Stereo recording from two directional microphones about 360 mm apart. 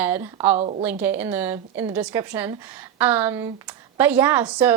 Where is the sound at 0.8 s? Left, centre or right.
Centre.